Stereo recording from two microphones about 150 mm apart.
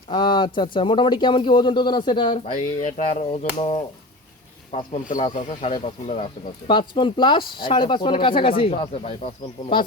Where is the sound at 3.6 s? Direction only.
40° left (ahead or behind).